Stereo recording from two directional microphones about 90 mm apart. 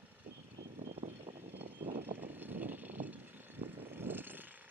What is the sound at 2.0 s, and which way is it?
Vehicle, 20° right (ahead or behind).